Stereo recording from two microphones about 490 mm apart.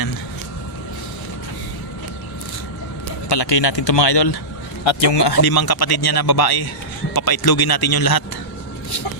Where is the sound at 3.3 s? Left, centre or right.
Left.